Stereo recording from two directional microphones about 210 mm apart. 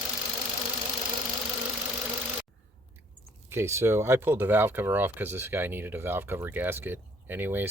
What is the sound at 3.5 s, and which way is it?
Speech, 10° right (ahead or behind).